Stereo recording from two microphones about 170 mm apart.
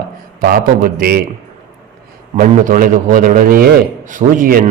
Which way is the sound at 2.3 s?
50° right (ahead or behind).